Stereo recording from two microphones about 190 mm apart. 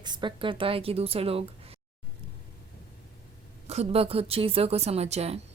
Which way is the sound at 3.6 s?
35° right (ahead or behind).